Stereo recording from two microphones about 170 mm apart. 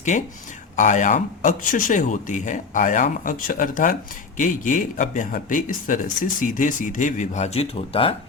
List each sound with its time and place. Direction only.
0.1 s speech: 45° left (ahead or behind)